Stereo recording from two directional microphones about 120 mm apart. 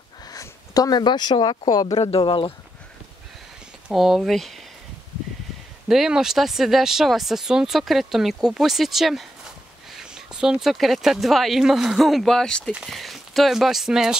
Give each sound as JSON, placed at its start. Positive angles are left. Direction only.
{"t": 0.3, "sound": "speech", "side_deg": 30}
{"t": 2.0, "sound": "speech", "side_deg": 55}
{"t": 3.9, "sound": "speech", "side_deg": 0}
{"t": 5.9, "sound": "speech", "side_deg": -5}